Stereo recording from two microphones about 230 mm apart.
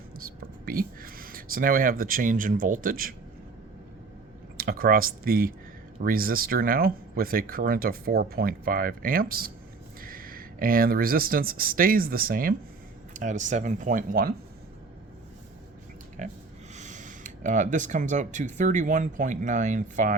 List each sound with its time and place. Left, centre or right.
0.3 s speech: right
4.5 s speech: right
16.2 s speech: right